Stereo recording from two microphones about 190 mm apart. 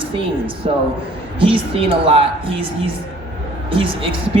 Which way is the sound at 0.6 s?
35° right (ahead or behind).